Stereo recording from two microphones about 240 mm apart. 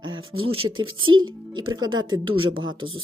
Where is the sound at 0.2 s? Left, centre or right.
Right.